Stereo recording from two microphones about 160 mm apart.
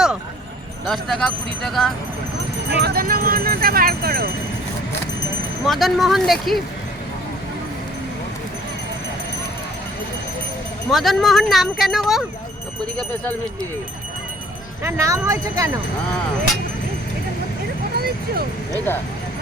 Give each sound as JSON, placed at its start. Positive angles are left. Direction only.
{"t": 0.9, "sound": "speech", "side_deg": 0}
{"t": 2.8, "sound": "speech", "side_deg": -70}
{"t": 5.6, "sound": "speech", "side_deg": 0}
{"t": 10.9, "sound": "speech", "side_deg": 0}
{"t": 14.8, "sound": "speech", "side_deg": -20}
{"t": 17.9, "sound": "a sound", "side_deg": -75}
{"t": 18.9, "sound": "speech", "side_deg": 15}